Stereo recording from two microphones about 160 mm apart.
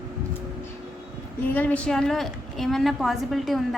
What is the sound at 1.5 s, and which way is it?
A woman's voice, 10° left (ahead or behind).